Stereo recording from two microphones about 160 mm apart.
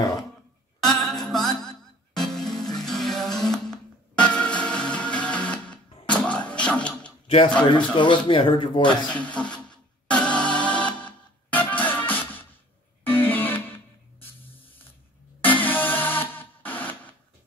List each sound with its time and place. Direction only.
0.8 s music: centre (ahead or behind)
7.2 s speech: 35° left (ahead or behind)
9.1 s music: 10° left (ahead or behind)
15.4 s music: 10° left (ahead or behind)